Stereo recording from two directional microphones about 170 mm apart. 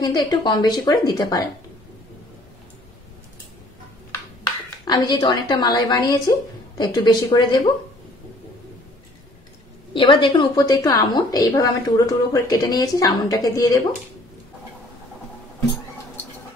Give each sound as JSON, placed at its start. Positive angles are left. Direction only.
{"t": 0.0, "sound": "a woman's voice", "side_deg": 25}
{"t": 4.8, "sound": "a woman's voice", "side_deg": 25}
{"t": 9.9, "sound": "a woman's voice", "side_deg": 30}